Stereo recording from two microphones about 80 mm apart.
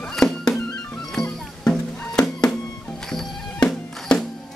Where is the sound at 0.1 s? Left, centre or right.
Centre.